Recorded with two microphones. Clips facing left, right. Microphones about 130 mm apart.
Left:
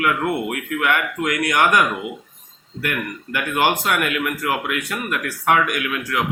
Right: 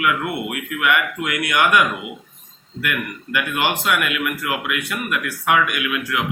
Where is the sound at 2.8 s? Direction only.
40° left (ahead or behind).